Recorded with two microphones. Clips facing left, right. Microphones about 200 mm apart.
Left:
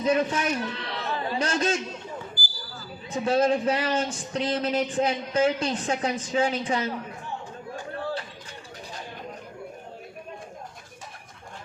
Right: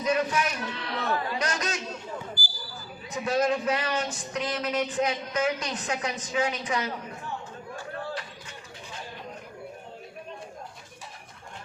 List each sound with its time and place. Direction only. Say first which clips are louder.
0.0 s a man's voice: left 2 dB; 30° left (ahead or behind)
3.1 s a man's voice: left 3 dB; 30° left (ahead or behind)